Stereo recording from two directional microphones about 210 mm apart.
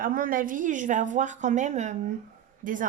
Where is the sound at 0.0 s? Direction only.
40° right (ahead or behind).